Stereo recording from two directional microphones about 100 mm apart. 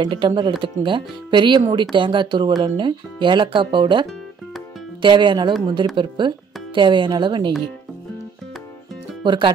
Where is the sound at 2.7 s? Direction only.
55° right (ahead or behind).